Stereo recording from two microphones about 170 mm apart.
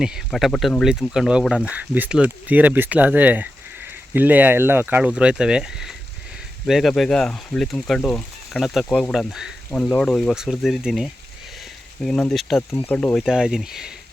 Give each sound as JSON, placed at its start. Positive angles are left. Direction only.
{"t": 0.0, "sound": "speech", "side_deg": 0}
{"t": 12.7, "sound": "speech", "side_deg": 10}
{"t": 13.2, "sound": "speech", "side_deg": -5}